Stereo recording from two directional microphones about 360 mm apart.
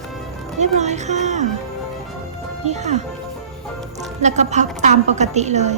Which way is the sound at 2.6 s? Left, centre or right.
Centre.